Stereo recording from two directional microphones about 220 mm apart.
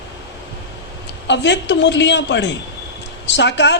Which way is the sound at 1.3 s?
55° left (ahead or behind).